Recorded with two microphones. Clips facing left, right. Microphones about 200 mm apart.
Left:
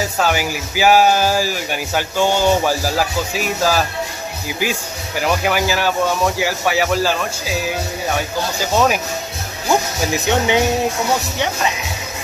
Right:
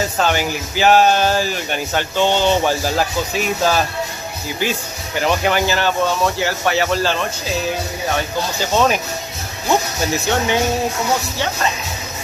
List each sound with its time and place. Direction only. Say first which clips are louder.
0.0 s speech: even; 5° left (ahead or behind)
8.7 s speech: even; 5° left (ahead or behind)
10.1 s speech: left 2 dB; 15° left (ahead or behind)